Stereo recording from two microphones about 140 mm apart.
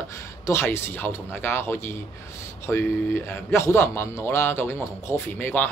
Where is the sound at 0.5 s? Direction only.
20° left (ahead or behind).